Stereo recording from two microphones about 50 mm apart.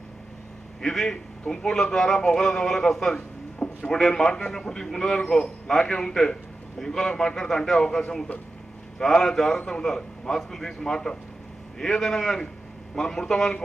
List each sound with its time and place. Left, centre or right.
0.8 s a man's voice: centre
3.5 s a sound: left
3.9 s a man's voice: centre